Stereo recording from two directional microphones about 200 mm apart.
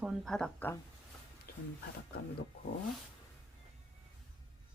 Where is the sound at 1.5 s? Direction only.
45° left (ahead or behind).